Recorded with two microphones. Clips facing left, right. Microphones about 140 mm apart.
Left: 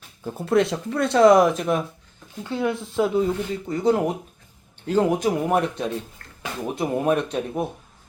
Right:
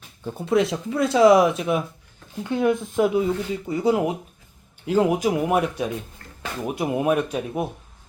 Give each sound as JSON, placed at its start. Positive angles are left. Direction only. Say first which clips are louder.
{"t": 0.3, "sound": "speech", "louder": "left 1 dB", "side_deg": 0}
{"t": 2.4, "sound": "speech", "louder": "right 4 dB", "side_deg": -15}